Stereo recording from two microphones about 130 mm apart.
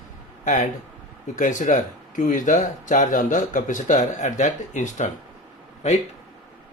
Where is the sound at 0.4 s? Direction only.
75° left (ahead or behind).